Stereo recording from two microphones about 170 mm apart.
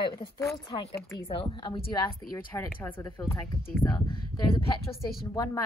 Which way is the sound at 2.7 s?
15° left (ahead or behind).